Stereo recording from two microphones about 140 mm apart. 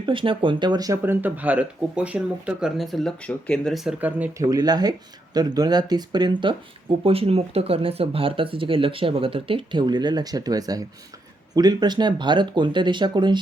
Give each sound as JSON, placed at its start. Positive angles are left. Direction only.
{"t": 0.0, "sound": "speech", "side_deg": -35}
{"t": 1.0, "sound": "speech", "side_deg": -15}
{"t": 4.4, "sound": "speech", "side_deg": -30}